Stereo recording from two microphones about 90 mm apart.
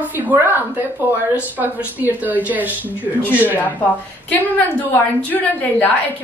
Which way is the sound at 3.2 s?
20° left (ahead or behind).